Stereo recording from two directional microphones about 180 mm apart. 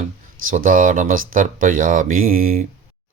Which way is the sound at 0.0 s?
45° right (ahead or behind).